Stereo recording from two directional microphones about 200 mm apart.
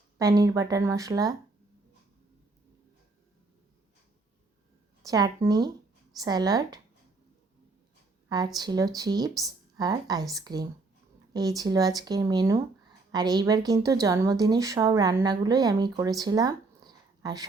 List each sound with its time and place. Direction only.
0.2 s speech: 20° right (ahead or behind)
5.0 s a woman's voice: 15° right (ahead or behind)
8.5 s a woman's voice: 20° right (ahead or behind)